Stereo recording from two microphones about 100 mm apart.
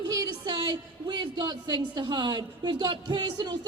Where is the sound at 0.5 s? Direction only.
50° right (ahead or behind).